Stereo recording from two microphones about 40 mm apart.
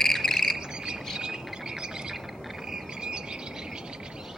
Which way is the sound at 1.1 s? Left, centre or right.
Centre.